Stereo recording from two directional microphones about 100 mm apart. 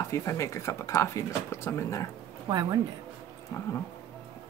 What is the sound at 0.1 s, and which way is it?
Speech, 30° left (ahead or behind).